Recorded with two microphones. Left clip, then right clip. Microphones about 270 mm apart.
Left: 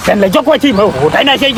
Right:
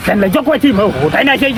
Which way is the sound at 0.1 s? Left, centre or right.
Left.